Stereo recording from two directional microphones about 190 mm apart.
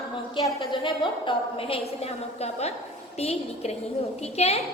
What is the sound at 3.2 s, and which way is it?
A woman's voice, 35° left (ahead or behind).